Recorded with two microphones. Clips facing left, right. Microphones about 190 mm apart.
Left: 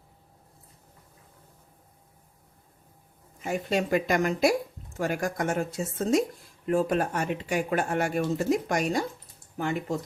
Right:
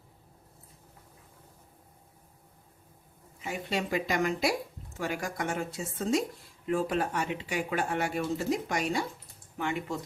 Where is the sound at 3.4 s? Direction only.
45° left (ahead or behind).